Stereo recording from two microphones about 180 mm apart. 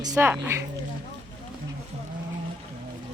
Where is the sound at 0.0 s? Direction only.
20° right (ahead or behind).